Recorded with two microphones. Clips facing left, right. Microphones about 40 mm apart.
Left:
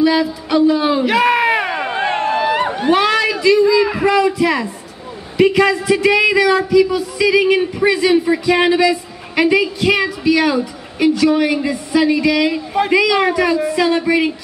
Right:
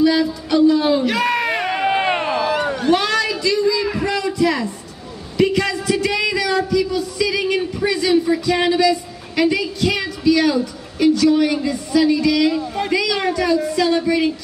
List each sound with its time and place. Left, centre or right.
0.0 s a man's voice: centre
1.9 s a sound: centre
2.3 s a man's voice: left